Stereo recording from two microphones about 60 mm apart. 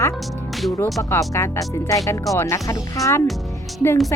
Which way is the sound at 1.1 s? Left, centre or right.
Left.